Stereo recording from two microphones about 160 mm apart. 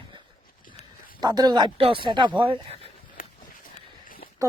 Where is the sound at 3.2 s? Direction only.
60° left (ahead or behind).